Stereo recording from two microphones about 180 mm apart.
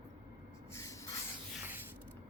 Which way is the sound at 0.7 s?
15° left (ahead or behind).